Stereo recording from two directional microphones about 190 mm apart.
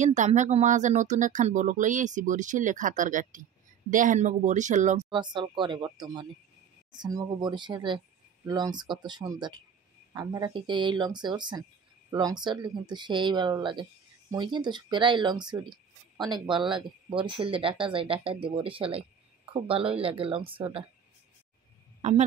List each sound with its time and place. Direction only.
0.0 s speech: 40° right (ahead or behind)
5.1 s speech: 25° right (ahead or behind)